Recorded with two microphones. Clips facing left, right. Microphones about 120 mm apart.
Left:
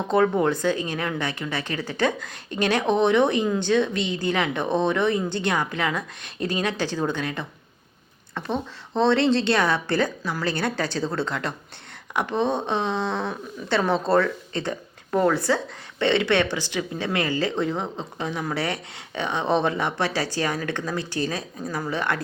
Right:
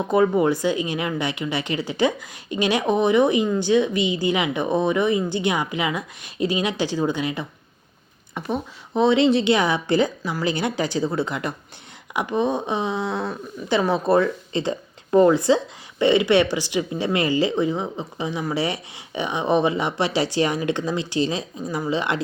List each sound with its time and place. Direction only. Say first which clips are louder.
0.1 s speech: right 2 dB; 10° right (ahead or behind)